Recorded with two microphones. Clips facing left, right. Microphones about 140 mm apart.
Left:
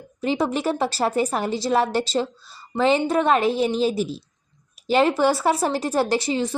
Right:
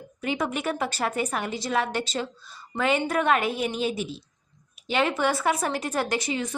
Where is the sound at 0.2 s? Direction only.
30° left (ahead or behind).